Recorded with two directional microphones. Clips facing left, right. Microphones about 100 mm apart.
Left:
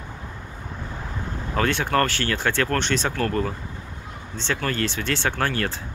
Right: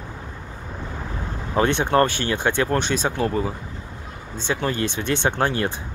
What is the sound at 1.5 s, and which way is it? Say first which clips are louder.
Speech: right 3 dB; 20° right (ahead or behind).